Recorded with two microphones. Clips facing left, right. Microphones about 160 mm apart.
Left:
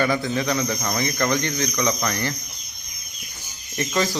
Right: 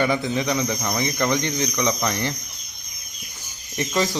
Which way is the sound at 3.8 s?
20° right (ahead or behind).